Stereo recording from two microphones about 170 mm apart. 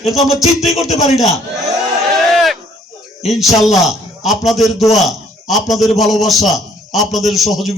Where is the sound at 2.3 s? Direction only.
Centre (ahead or behind).